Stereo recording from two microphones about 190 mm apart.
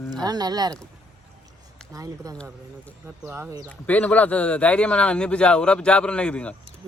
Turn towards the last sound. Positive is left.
turn(degrees=5)  # may be behind; listen again after turning